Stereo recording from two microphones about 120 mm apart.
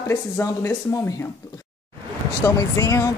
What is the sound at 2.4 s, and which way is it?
Speech, 25° left (ahead or behind).